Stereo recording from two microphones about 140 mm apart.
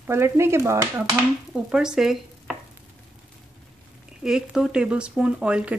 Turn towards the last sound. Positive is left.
turn(degrees=-10)  # may be behind; listen again after turning